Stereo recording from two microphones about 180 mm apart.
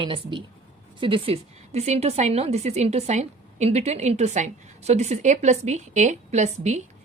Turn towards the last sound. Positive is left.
turn(degrees=-40)  # may be behind; listen again after turning